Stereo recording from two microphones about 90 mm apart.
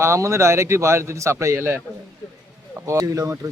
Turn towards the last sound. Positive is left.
turn(degrees=-40)  # may be behind; listen again after turning